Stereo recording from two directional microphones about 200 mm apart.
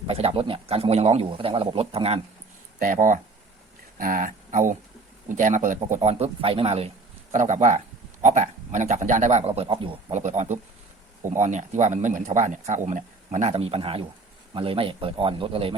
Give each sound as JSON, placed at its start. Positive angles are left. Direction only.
{"t": 0.1, "sound": "speech", "side_deg": -30}
{"t": 2.7, "sound": "speech", "side_deg": -40}